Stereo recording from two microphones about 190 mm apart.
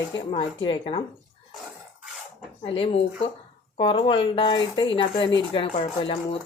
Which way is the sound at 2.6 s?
30° left (ahead or behind).